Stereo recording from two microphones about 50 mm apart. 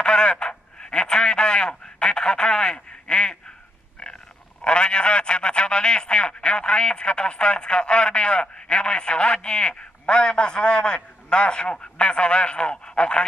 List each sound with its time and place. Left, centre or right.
0.0 s radio: centre
4.0 s a man's voice: centre